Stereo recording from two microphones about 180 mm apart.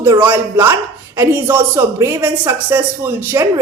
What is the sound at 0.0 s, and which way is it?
A woman's voice, 10° right (ahead or behind).